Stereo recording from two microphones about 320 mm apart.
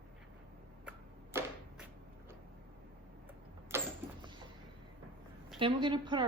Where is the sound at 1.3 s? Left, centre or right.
Centre.